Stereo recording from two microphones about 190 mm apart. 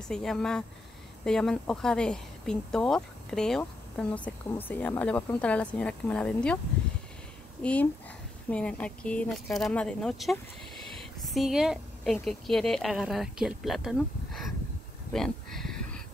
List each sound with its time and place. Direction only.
0.1 s speech: centre (ahead or behind)
7.6 s speech: 10° left (ahead or behind)
15.1 s a sound: centre (ahead or behind)